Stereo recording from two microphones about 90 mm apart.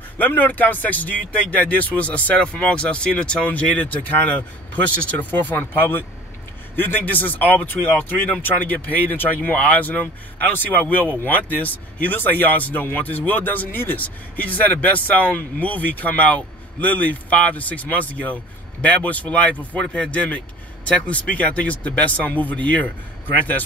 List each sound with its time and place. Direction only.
0.2 s speech: 20° left (ahead or behind)